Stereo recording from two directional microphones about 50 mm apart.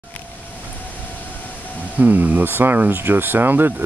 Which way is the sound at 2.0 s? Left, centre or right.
Right.